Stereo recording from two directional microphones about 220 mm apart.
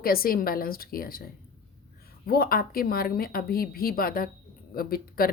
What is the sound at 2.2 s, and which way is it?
Speech, 45° left (ahead or behind).